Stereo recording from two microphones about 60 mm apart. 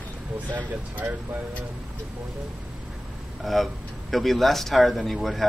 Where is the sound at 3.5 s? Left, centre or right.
Centre.